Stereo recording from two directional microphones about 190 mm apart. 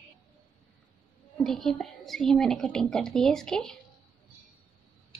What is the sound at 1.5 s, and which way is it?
A woman's voice, centre (ahead or behind).